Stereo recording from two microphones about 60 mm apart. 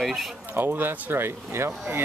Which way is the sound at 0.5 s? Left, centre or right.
Right.